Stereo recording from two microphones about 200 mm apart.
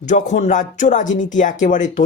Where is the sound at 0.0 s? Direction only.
35° left (ahead or behind).